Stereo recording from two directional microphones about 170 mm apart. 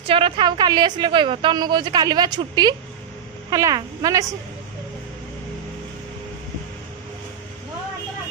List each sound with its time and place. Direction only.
0.1 s a woman's voice: 30° right (ahead or behind)